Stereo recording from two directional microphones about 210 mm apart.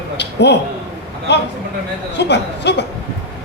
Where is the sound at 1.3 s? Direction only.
55° left (ahead or behind).